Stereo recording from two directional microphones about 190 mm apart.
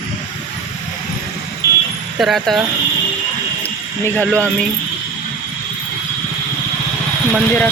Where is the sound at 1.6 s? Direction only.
15° right (ahead or behind).